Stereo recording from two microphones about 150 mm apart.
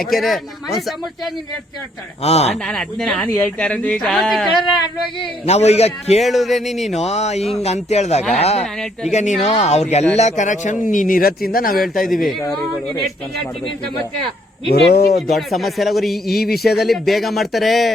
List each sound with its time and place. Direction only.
0.0 s speech: centre (ahead or behind)
2.2 s a man's voice: 45° left (ahead or behind)
2.6 s speech: 5° left (ahead or behind)
5.2 s a man's voice: 45° left (ahead or behind)
6.2 s speech: centre (ahead or behind)
6.9 s a man's voice: 45° left (ahead or behind)
8.6 s speech: centre (ahead or behind)
9.1 s a man's voice: 50° left (ahead or behind); by 11.8 s 75° left (ahead or behind)
14.7 s speech: 90° left
15.3 s speech: centre (ahead or behind)
16.4 s speech: 90° left
16.7 s speech: centre (ahead or behind)